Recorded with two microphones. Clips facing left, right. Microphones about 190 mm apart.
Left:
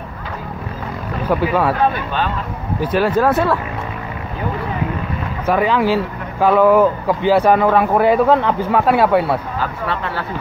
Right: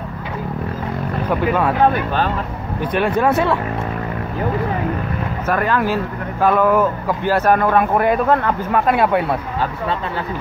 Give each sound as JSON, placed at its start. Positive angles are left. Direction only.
{"t": 1.3, "sound": "a man's voice", "side_deg": 5}
{"t": 2.8, "sound": "speech", "side_deg": 5}
{"t": 5.5, "sound": "a man's voice", "side_deg": 10}
{"t": 9.6, "sound": "speech", "side_deg": -20}